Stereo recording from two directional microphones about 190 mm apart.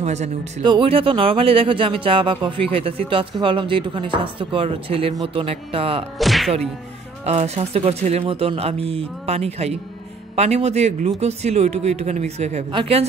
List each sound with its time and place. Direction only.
0.0 s speech: 35° right (ahead or behind)
6.1 s music: centre (ahead or behind)
7.2 s speech: 35° right (ahead or behind)